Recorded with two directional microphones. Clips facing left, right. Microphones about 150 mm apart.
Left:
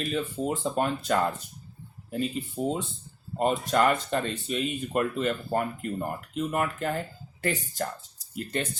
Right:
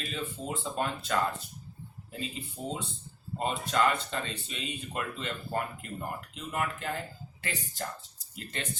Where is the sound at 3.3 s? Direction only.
45° left (ahead or behind).